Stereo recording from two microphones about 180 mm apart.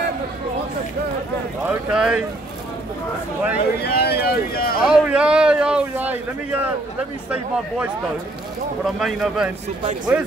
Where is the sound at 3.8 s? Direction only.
65° left (ahead or behind).